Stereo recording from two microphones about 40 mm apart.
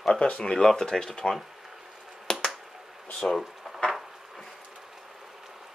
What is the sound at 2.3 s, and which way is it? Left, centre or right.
Finger snapping, left.